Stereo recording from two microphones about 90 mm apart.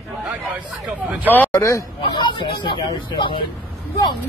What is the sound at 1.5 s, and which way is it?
Speech, 35° left (ahead or behind).